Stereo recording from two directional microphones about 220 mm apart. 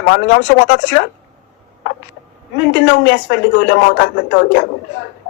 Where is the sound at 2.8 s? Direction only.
50° left (ahead or behind).